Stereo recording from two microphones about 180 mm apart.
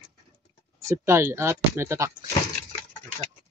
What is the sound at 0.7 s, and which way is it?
Speech, 15° right (ahead or behind).